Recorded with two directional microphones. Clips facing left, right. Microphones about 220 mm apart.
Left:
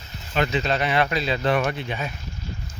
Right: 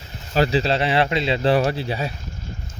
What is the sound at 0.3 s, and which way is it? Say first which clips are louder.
Speech: right 4 dB; 35° right (ahead or behind).